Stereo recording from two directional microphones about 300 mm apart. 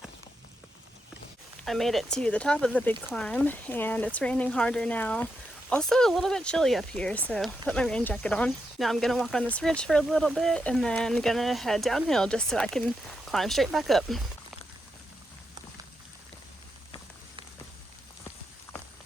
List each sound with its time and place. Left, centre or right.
1.6 s speech: centre